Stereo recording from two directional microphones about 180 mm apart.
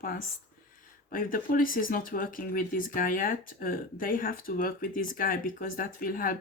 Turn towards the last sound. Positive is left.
turn(degrees=50)  # may be behind; listen again after turning